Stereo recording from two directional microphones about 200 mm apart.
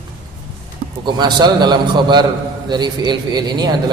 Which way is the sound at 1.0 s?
20° right (ahead or behind).